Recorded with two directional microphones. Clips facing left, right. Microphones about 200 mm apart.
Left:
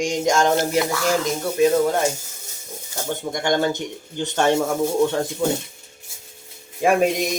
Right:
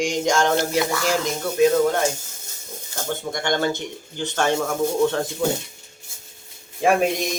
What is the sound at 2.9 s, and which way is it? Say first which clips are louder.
Speech: left 1 dB; 15° left (ahead or behind).